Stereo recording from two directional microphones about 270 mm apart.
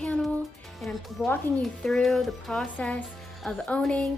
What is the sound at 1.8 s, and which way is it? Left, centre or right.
A woman's voice, centre.